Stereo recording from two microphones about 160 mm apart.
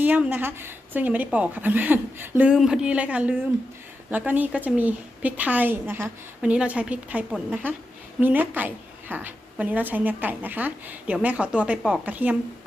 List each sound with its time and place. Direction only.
0.0 s a woman's voice: 10° right (ahead or behind)